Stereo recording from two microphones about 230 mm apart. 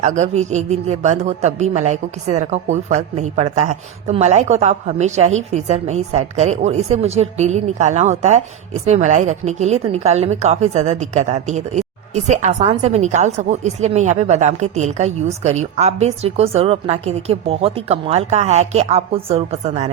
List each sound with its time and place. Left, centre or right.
0.0 s a woman's voice: right